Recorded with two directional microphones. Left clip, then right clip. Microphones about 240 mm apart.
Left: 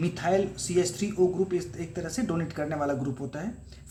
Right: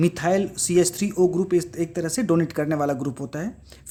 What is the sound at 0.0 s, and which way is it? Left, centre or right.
Speech, right.